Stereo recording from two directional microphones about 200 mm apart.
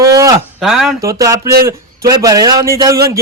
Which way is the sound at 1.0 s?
15° right (ahead or behind).